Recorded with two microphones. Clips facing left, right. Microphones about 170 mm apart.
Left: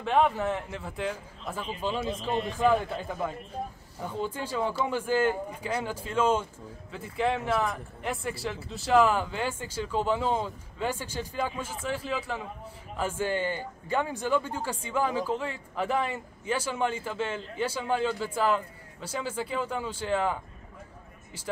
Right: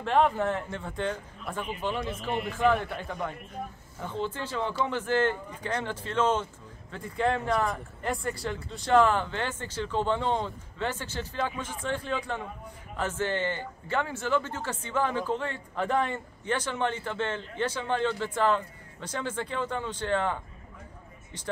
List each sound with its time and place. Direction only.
0.0 s speech: centre (ahead or behind)
2.2 s a man's voice: 20° left (ahead or behind)
3.1 s a man's voice: 5° left (ahead or behind)